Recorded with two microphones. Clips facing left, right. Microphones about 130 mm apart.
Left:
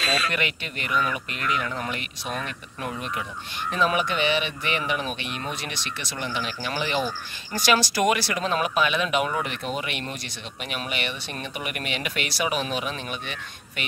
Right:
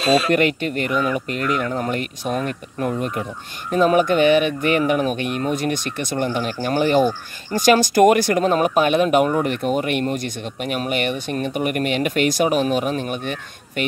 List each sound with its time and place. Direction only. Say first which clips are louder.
0.3 s speech: right 12 dB; 45° right (ahead or behind)